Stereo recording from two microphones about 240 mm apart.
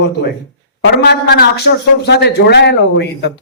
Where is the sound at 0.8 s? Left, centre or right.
Left.